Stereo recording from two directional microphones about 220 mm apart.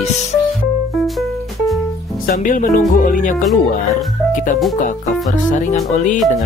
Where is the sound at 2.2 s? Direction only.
40° left (ahead or behind).